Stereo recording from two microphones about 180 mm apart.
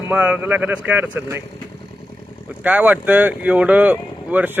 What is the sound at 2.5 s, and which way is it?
Speech, 10° right (ahead or behind).